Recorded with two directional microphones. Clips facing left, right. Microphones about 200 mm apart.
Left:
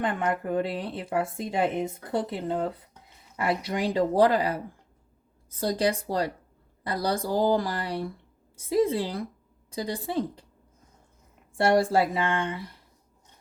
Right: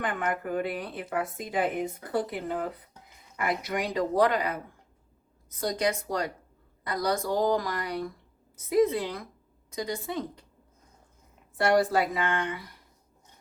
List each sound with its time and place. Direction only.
0.0 s a woman's voice: 25° left (ahead or behind)
11.5 s a woman's voice: 25° left (ahead or behind)